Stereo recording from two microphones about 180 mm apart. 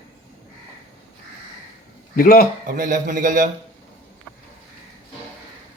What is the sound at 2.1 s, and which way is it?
Speech, 50° left (ahead or behind).